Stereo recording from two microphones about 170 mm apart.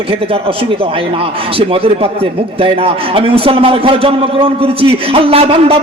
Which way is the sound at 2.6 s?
35° right (ahead or behind).